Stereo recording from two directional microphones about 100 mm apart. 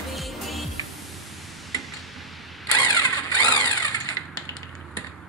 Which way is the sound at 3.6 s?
35° left (ahead or behind).